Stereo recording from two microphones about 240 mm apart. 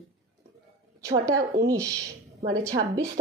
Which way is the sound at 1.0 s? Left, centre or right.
Centre.